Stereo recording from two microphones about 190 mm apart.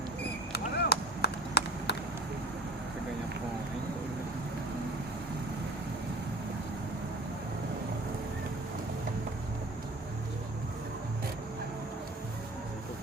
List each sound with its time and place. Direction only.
0.5 s run: 55° left (ahead or behind)